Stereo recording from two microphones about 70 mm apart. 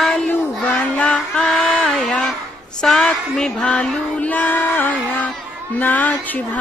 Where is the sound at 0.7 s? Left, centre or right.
Centre.